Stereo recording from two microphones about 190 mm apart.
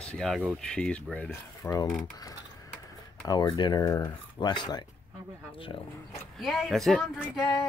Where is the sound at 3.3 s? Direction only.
20° left (ahead or behind).